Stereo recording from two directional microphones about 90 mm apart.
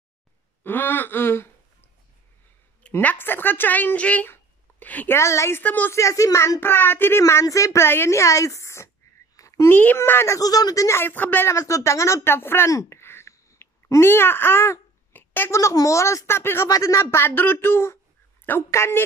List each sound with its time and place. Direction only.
0.7 s speech: 20° left (ahead or behind)
2.9 s speech: 20° left (ahead or behind)
5.1 s speech: 30° left (ahead or behind)
5.6 s speech: 20° left (ahead or behind)
5.9 s speech: 35° left (ahead or behind)
9.4 s a sound: 35° left (ahead or behind)
9.8 s speech: 20° left (ahead or behind); by 11.0 s 40° left (ahead or behind)
11.0 s speech: 25° left (ahead or behind)
11.5 s speech: 35° left (ahead or behind)
15.5 s speech: 35° left (ahead or behind)